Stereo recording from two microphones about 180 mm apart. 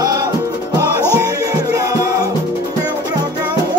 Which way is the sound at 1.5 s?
20° right (ahead or behind).